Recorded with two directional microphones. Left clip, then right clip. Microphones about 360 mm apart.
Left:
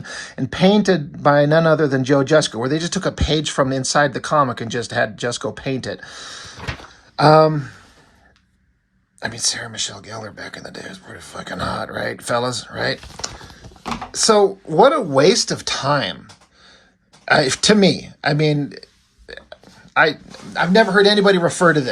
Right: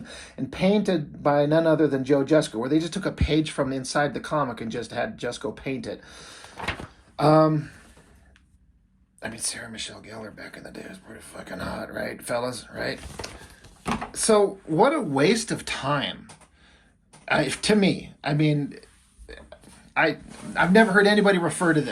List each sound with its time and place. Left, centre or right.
0.0 s a sound: left
0.7 s speech: left
9.2 s speech: left
17.2 s speech: centre